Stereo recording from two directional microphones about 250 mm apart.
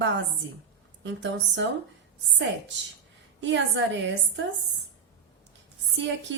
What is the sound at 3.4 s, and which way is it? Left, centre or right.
A woman's voice, right.